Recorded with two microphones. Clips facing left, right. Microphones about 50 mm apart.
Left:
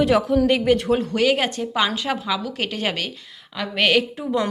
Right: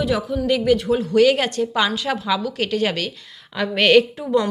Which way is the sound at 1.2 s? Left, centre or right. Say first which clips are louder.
Right 4 dB; centre.